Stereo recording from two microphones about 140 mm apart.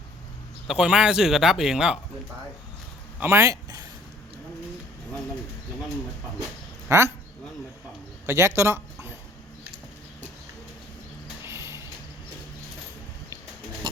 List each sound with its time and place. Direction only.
0.7 s speech: 5° right (ahead or behind)
3.2 s a man's voice: 20° right (ahead or behind)
6.8 s speech: 20° right (ahead or behind)
8.3 s speech: 20° right (ahead or behind)
11.4 s music: 20° right (ahead or behind)
13.9 s a sound: 35° right (ahead or behind)